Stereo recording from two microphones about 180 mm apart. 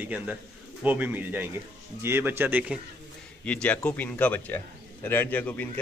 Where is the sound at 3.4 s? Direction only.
5° left (ahead or behind).